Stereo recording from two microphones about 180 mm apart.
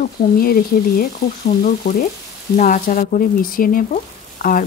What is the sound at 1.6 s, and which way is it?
Frying, 55° left (ahead or behind).